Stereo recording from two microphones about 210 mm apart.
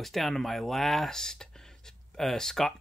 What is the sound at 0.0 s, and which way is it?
Speech, centre (ahead or behind).